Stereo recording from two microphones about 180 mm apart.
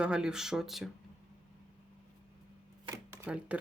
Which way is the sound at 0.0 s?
5° right (ahead or behind).